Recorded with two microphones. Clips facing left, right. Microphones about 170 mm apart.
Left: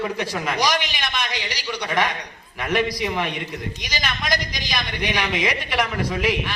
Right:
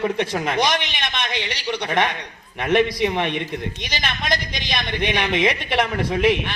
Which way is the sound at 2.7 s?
20° right (ahead or behind).